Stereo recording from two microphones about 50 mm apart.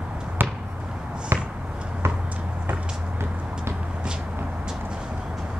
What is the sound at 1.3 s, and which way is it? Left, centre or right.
Basketball bounce, right.